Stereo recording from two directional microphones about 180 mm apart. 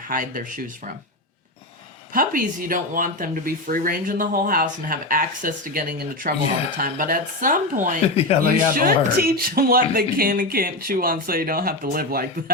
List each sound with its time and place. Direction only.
0.1 s speech: 50° right (ahead or behind)
2.1 s speech: 50° right (ahead or behind)
8.3 s speech: 35° left (ahead or behind)
8.7 s speech: 55° right (ahead or behind)